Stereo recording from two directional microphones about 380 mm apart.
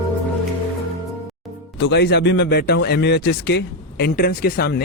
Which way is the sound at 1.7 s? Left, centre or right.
Left.